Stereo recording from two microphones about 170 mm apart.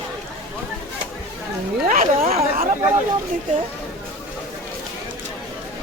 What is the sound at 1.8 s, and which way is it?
Speech, 45° right (ahead or behind).